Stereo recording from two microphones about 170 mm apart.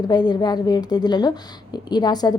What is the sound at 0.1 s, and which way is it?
A woman's voice, 25° left (ahead or behind).